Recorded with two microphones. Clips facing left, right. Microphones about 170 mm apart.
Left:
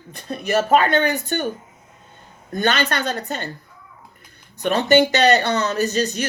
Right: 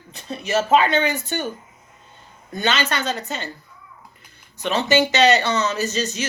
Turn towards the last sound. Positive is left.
turn(degrees=55)  # may be behind; listen again after turning